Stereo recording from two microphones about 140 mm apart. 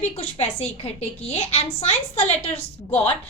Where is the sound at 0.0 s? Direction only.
50° left (ahead or behind).